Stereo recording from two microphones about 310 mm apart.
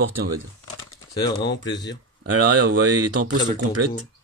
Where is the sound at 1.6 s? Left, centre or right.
Centre.